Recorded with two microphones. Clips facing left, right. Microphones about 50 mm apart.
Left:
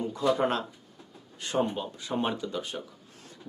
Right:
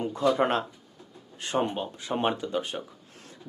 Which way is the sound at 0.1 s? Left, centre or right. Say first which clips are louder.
Right 2 dB; right.